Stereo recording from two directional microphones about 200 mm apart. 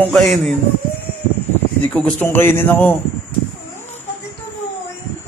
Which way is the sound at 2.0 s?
5° left (ahead or behind).